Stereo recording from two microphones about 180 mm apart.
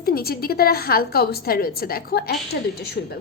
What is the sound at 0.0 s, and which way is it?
A woman's voice, 55° left (ahead or behind).